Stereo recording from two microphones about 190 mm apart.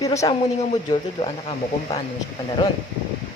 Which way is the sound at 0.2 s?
20° left (ahead or behind).